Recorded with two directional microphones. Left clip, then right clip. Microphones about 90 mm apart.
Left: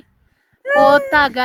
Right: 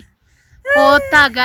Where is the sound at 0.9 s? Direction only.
60° left (ahead or behind).